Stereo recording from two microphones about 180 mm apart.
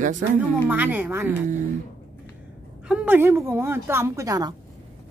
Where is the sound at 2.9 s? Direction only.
10° right (ahead or behind).